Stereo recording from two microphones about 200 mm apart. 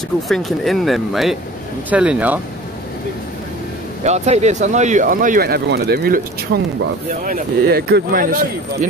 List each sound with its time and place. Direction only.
0.3 s speech: centre (ahead or behind)
4.0 s speech: 35° right (ahead or behind)